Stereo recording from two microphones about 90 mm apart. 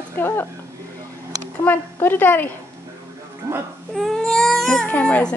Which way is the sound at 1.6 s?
20° left (ahead or behind).